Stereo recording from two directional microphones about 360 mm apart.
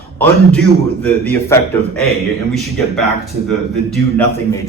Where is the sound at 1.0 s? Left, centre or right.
Centre.